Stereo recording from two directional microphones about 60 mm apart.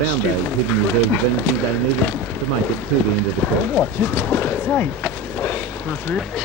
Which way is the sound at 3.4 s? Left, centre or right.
Left.